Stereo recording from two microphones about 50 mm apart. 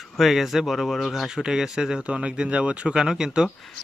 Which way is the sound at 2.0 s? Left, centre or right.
Right.